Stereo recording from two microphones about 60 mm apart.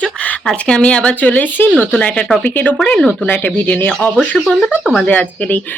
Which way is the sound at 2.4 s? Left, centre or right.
Left.